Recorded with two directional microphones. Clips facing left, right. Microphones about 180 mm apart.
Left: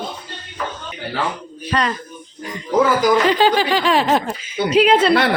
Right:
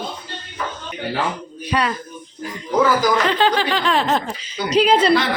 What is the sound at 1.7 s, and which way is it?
Speech, 10° right (ahead or behind).